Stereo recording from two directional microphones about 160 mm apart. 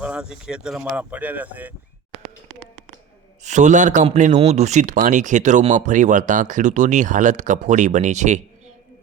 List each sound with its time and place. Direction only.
0.0 s speech: 5° right (ahead or behind)
3.4 s speech: 50° right (ahead or behind)